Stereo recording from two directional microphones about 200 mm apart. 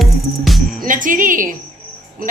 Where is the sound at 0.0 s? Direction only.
Centre (ahead or behind).